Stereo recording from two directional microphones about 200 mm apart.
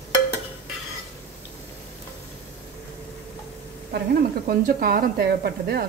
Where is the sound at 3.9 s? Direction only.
45° right (ahead or behind).